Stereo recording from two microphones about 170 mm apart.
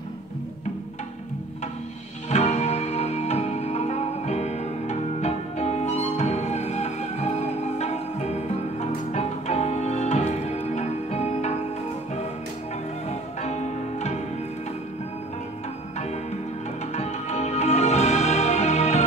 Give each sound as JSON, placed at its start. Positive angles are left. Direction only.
{"t": 2.2, "sound": "music", "side_deg": 40}
{"t": 13.1, "sound": "music", "side_deg": 40}
{"t": 16.9, "sound": "music", "side_deg": 40}